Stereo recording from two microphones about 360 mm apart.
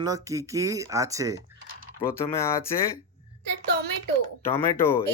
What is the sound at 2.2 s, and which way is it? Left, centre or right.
Speech, centre.